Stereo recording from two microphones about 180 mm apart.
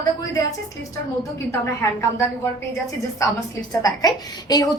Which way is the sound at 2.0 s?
15° left (ahead or behind).